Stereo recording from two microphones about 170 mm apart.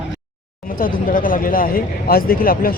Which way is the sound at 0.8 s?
55° left (ahead or behind).